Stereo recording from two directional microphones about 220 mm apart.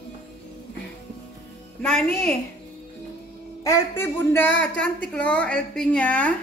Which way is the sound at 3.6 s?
10° left (ahead or behind).